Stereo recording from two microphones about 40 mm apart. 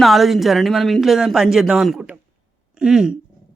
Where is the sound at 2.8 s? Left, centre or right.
Centre.